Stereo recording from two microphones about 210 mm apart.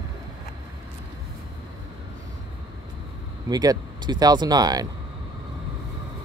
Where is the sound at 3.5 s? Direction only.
20° right (ahead or behind).